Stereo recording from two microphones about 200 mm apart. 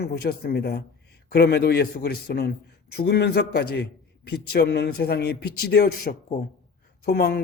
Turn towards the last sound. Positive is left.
turn(degrees=55)  # may be behind; listen again after turning